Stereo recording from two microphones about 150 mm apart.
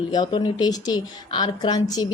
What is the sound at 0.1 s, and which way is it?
A woman's voice, 30° left (ahead or behind).